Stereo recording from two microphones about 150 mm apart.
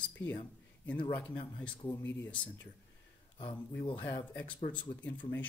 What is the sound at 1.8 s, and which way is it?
Speech, 20° left (ahead or behind).